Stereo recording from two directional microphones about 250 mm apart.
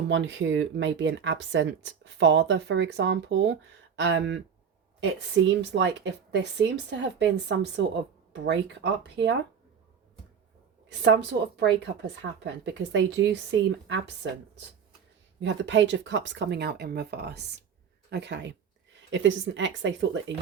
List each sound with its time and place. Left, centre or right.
0.1 s speech: right
10.8 s speech: right